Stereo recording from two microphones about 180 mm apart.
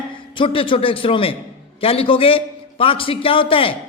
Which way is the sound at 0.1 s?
30° left (ahead or behind).